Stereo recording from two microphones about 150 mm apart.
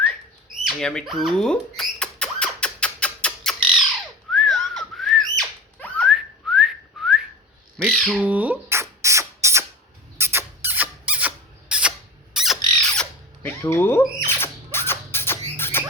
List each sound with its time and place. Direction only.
0.6 s rodents: centre (ahead or behind)
4.3 s a sound: centre (ahead or behind)
6.1 s whistling: 5° right (ahead or behind)
7.8 s bird: centre (ahead or behind)
8.2 s spray: 10° right (ahead or behind)
10.2 s rodents: 15° right (ahead or behind); by 13.5 s 5° left (ahead or behind)
13.6 s speech: 15° left (ahead or behind)
14.3 s a sound: 15° left (ahead or behind)